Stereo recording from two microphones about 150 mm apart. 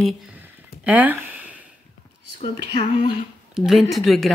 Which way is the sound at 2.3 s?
40° left (ahead or behind).